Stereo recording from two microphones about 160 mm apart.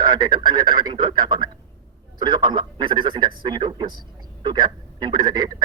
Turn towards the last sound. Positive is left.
turn(degrees=-25)  # may be behind; listen again after turning